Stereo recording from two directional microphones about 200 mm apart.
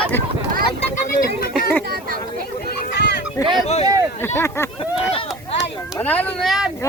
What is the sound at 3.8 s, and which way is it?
Speech, 15° right (ahead or behind).